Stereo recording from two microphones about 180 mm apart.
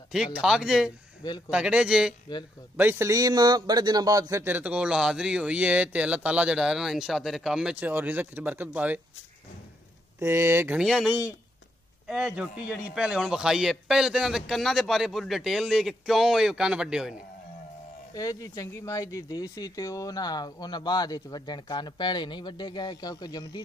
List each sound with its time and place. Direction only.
0.1 s a man's voice: 5° right (ahead or behind)
10.1 s a man's voice: 15° right (ahead or behind)
18.1 s speech: 20° left (ahead or behind)